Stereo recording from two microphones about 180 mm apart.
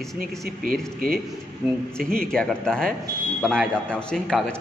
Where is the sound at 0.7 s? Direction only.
55° right (ahead or behind).